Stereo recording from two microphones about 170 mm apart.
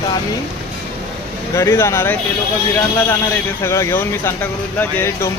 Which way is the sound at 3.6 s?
15° left (ahead or behind).